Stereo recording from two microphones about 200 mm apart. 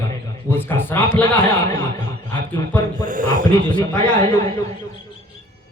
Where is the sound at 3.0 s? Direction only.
40° right (ahead or behind).